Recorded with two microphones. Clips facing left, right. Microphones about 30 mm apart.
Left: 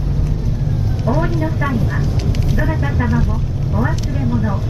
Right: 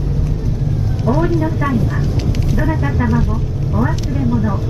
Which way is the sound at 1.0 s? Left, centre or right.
Centre.